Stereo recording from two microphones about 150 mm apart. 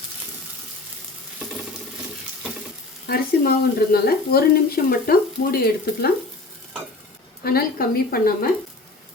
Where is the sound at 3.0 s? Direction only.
85° left.